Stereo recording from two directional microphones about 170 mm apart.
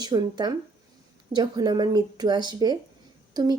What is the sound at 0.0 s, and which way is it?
Speech, 25° right (ahead or behind).